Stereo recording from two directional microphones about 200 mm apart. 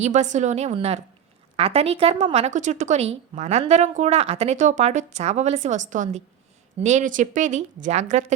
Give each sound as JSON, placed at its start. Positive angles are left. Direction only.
{"t": 0.0, "sound": "speech", "side_deg": -35}